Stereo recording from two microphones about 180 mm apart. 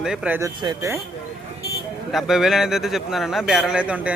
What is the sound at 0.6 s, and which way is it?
Speech, 20° right (ahead or behind).